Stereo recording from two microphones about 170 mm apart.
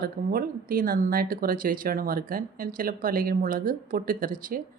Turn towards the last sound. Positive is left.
turn(degrees=-55)  # may be behind; listen again after turning